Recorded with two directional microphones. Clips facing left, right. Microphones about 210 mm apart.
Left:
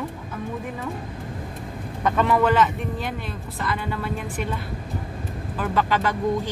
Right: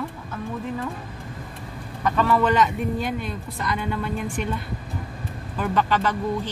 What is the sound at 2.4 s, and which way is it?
Speech, centre (ahead or behind).